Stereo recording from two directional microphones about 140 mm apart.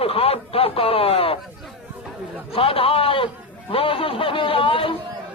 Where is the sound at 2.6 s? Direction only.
40° left (ahead or behind).